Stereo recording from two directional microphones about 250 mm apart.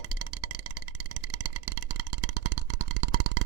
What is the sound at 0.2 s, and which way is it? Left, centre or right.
Music, right.